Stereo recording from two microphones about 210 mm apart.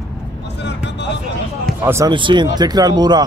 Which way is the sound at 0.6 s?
55° left (ahead or behind).